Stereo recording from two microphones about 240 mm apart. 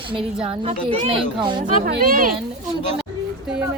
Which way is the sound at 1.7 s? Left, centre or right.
Right.